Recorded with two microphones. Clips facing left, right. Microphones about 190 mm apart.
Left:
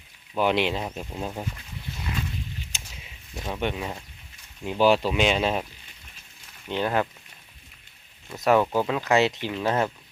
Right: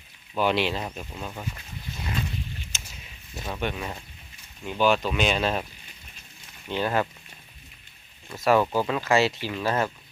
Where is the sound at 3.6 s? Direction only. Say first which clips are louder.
Left 2 dB; 20° left (ahead or behind).